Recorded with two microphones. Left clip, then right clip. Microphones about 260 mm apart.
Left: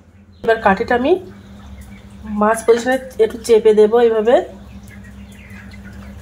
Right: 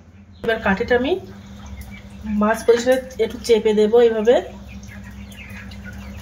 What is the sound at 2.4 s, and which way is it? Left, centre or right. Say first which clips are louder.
Speech: left 3 dB; centre.